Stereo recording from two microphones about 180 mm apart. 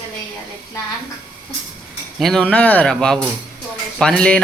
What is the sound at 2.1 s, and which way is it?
Speech, centre (ahead or behind).